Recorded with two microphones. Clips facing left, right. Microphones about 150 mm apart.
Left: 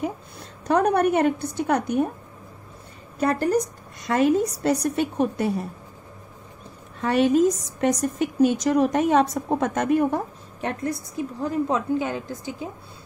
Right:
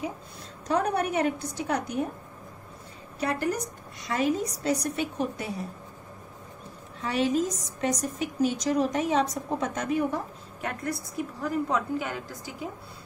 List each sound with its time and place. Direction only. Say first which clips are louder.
0.7 s a woman's voice: left 7 dB; 60° left (ahead or behind)
3.2 s a woman's voice: left 7 dB; 40° left (ahead or behind)
7.0 s a woman's voice: left 7 dB; 60° left (ahead or behind)
10.6 s a woman's voice: left 5 dB; 25° left (ahead or behind)